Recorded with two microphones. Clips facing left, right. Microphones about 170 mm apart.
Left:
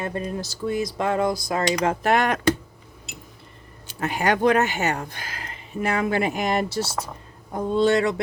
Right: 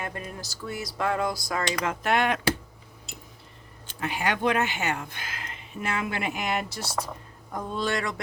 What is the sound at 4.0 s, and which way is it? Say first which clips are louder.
Speech: left 6 dB; 45° left (ahead or behind).